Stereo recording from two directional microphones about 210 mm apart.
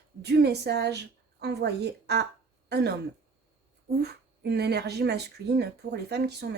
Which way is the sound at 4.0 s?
50° right (ahead or behind).